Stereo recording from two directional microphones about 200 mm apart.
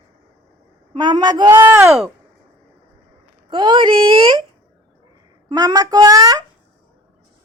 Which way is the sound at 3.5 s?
25° right (ahead or behind).